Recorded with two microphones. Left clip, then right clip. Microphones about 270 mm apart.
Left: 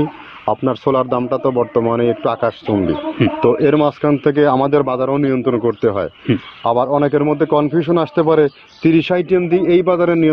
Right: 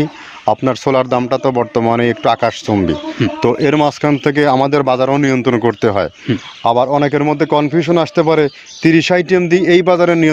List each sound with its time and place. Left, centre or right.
0.5 s a man's voice: right